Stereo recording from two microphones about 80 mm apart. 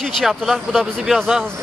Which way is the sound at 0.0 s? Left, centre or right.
Centre.